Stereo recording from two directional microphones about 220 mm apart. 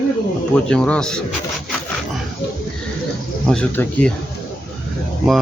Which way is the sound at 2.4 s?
50° left (ahead or behind).